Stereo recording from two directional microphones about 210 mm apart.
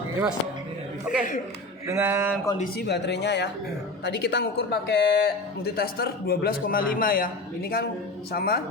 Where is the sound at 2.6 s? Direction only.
50° left (ahead or behind).